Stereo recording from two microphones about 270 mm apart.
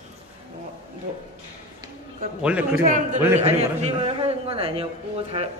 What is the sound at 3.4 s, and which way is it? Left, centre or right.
A man's voice, right.